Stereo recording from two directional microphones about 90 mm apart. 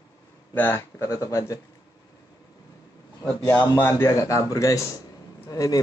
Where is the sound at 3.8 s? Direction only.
25° left (ahead or behind).